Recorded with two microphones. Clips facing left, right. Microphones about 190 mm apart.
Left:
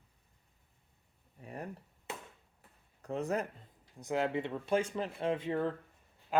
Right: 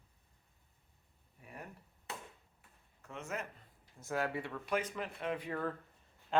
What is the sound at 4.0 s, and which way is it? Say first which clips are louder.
Speech: left 4 dB; 20° left (ahead or behind).